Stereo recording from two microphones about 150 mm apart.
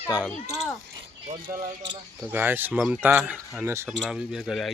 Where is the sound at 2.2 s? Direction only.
15° right (ahead or behind).